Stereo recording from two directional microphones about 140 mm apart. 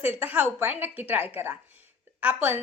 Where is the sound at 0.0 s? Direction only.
15° right (ahead or behind).